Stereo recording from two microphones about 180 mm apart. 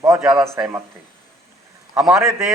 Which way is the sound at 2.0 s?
Centre (ahead or behind).